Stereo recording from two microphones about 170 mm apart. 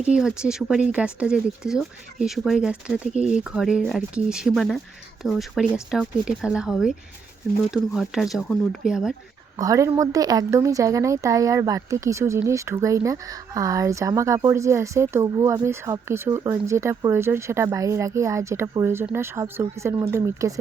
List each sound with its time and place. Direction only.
0.0 s speech: 5° right (ahead or behind)
9.6 s speech: 20° right (ahead or behind)